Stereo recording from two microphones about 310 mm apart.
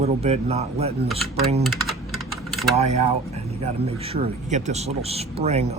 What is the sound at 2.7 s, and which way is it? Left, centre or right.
Speech, centre.